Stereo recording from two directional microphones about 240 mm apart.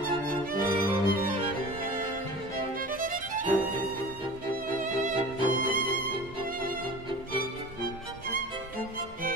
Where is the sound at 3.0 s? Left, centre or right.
Right.